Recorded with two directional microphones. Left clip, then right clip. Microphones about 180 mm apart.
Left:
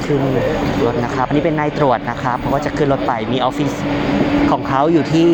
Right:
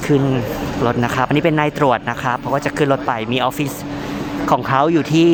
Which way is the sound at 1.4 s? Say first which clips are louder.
Right 1 dB; 45° right (ahead or behind).